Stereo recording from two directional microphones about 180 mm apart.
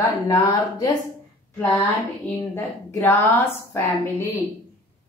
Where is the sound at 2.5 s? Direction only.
15° left (ahead or behind).